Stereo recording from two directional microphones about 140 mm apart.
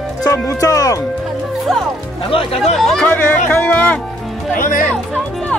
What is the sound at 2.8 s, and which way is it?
Speech, 5° left (ahead or behind).